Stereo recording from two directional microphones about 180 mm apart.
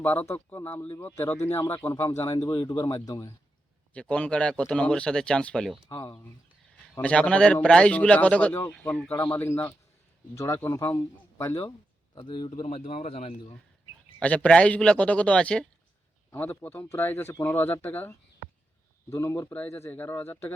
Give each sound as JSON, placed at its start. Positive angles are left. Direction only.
{"t": 0.0, "sound": "speech", "side_deg": 10}
{"t": 5.9, "sound": "speech", "side_deg": 25}
{"t": 7.0, "sound": "speech", "side_deg": 5}
{"t": 12.1, "sound": "a man's voice", "side_deg": 30}
{"t": 14.2, "sound": "speech", "side_deg": 5}